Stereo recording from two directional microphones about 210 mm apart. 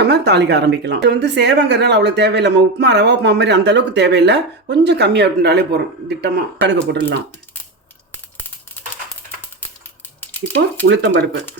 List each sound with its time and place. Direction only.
0.0 s speech: 50° right (ahead or behind)
8.8 s a sound: 10° left (ahead or behind)
10.8 s speech: 55° right (ahead or behind)